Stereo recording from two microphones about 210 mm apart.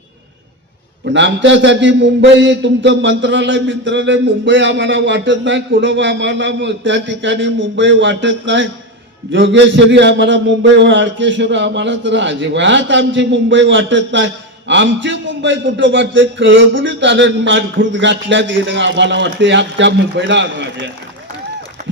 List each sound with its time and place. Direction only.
1.0 s a man's voice: 60° right (ahead or behind)